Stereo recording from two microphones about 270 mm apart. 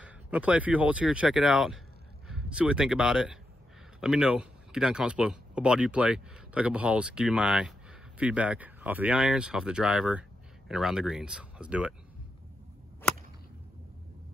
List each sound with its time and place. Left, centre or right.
0.0 s speech: centre